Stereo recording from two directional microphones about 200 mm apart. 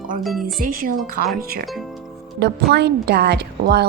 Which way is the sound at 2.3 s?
55° right (ahead or behind).